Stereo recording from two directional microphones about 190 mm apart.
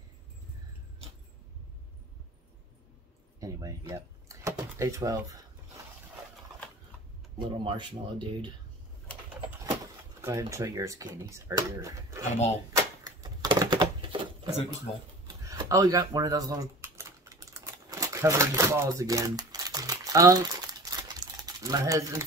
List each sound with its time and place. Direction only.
3.3 s speech: 15° right (ahead or behind)
3.9 s door: 15° right (ahead or behind)
7.3 s speech: 25° right (ahead or behind)
10.2 s speech: 15° right (ahead or behind)
12.7 s a sound: 20° right (ahead or behind)
15.2 s typing: 15° right (ahead or behind)